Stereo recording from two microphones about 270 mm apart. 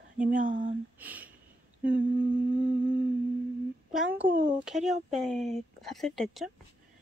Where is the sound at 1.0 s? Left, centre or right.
Centre.